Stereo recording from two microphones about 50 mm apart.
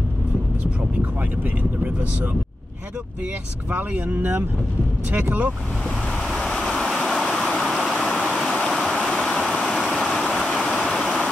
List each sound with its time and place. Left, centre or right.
4.2 s speech: right
6.1 s waves: centre
9.7 s a sound: centre
10.9 s stream: centre